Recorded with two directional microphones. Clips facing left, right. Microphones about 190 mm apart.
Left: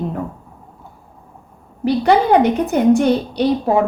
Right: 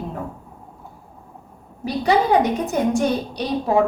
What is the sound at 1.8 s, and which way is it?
A woman's voice, 60° left (ahead or behind).